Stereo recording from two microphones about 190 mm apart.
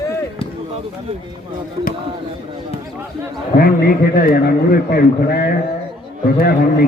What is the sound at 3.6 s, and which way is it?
A man's voice, 50° left (ahead or behind).